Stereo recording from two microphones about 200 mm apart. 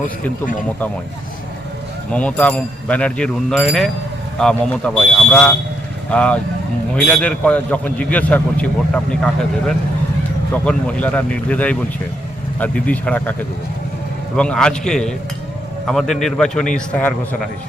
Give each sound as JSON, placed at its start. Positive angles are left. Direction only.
{"t": 0.0, "sound": "speech", "side_deg": 40}
{"t": 2.1, "sound": "a man's voice", "side_deg": 5}
{"t": 14.3, "sound": "a man's voice", "side_deg": 5}